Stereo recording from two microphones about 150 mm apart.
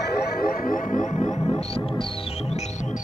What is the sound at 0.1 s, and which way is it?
Music, 90° left.